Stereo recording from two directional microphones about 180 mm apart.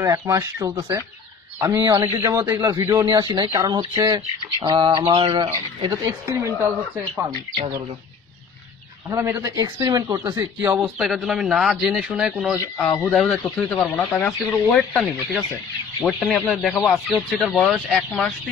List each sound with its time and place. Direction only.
0.0 s bird: 15° right (ahead or behind)
5.9 s speech: 15° right (ahead or behind)
7.2 s bird: 20° right (ahead or behind)
9.1 s bird: 15° right (ahead or behind)
10.8 s speech: 5° right (ahead or behind)
12.8 s speech: 15° left (ahead or behind)